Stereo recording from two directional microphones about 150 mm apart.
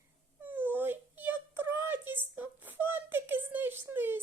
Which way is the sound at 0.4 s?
10° right (ahead or behind).